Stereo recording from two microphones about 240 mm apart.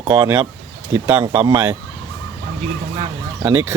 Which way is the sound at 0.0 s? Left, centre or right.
Centre.